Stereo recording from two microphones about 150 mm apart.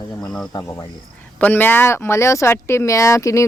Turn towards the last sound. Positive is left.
turn(degrees=20)  # may be behind; listen again after turning